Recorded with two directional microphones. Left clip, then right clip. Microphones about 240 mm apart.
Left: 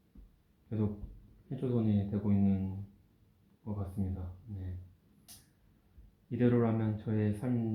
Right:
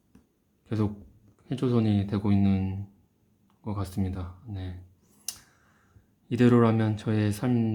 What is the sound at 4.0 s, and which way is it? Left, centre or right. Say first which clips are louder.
Speech: right 7 dB; right.